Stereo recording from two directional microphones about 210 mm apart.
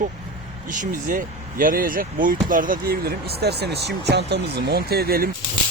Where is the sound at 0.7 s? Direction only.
40° right (ahead or behind).